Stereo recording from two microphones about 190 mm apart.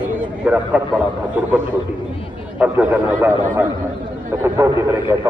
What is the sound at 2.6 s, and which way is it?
A man's voice, 10° right (ahead or behind).